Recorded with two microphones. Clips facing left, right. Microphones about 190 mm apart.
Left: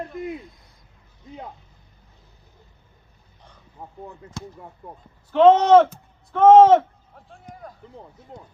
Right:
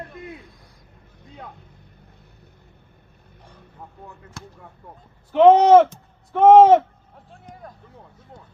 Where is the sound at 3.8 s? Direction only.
30° left (ahead or behind).